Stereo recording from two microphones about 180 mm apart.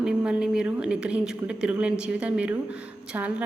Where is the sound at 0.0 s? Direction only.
5° right (ahead or behind).